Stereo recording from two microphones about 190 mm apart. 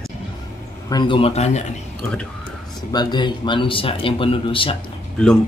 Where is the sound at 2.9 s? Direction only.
20° left (ahead or behind).